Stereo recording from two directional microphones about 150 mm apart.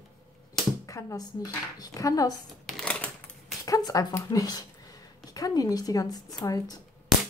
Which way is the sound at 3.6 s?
25° left (ahead or behind).